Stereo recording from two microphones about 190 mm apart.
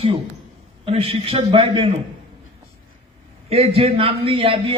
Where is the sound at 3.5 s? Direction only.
30° right (ahead or behind).